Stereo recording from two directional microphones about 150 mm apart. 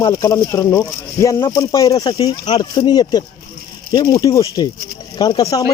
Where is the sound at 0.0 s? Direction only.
20° left (ahead or behind).